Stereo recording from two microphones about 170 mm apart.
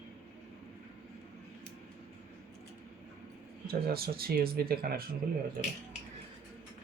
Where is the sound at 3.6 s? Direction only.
65° right (ahead or behind).